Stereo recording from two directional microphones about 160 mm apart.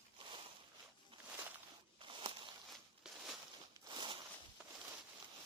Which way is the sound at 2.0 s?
30° right (ahead or behind).